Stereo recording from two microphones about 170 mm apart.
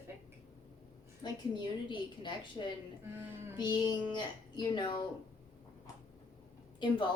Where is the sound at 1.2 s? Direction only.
25° left (ahead or behind).